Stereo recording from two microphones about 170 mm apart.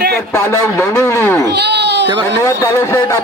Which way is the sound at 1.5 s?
85° right.